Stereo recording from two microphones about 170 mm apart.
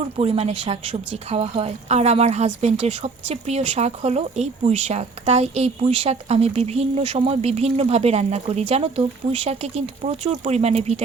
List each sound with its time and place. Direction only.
0.2 s speech: 35° right (ahead or behind)